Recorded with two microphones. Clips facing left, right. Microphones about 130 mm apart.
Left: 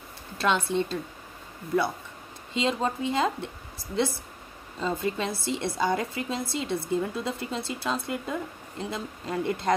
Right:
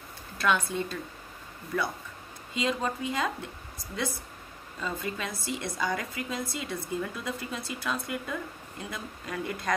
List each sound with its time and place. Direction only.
0.4 s a woman's voice: 25° left (ahead or behind)
2.5 s a woman's voice: 25° left (ahead or behind)
4.7 s a woman's voice: 25° left (ahead or behind)